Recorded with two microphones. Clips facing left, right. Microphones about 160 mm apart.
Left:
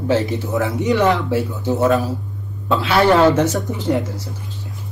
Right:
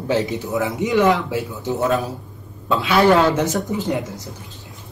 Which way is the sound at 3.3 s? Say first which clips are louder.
Left 2 dB; 15° right (ahead or behind).